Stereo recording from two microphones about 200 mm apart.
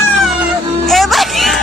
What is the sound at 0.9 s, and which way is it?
Music, centre (ahead or behind).